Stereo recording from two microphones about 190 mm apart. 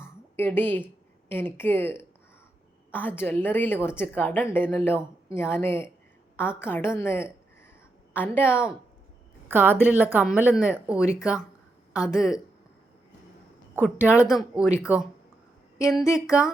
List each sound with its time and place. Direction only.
0.0 s a sound: 10° left (ahead or behind)
1.3 s a woman's voice: 10° left (ahead or behind)
9.5 s speech: 10° right (ahead or behind)
13.7 s speech: 10° right (ahead or behind)
15.8 s speech: centre (ahead or behind)
16.0 s a woman's voice: 15° left (ahead or behind)